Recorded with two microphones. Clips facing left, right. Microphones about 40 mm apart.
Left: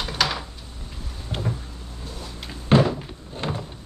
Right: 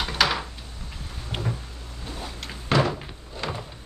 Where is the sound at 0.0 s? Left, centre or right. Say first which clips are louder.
Right 2 dB; centre.